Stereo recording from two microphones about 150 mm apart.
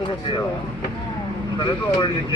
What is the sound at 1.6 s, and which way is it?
Speech, 35° left (ahead or behind).